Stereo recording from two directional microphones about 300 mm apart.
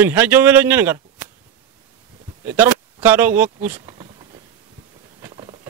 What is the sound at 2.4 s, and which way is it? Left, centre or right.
Speech, centre.